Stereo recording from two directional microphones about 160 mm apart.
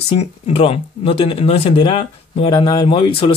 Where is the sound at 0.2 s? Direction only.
40° left (ahead or behind).